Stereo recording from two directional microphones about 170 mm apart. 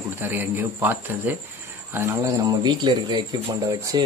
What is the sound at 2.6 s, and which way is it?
Speech, 25° right (ahead or behind).